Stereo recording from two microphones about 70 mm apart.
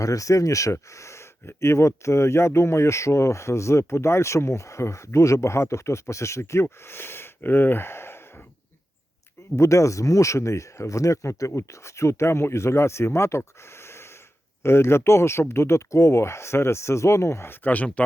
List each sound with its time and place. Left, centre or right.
0.0 s speech: left
9.6 s speech: left
14.6 s speech: left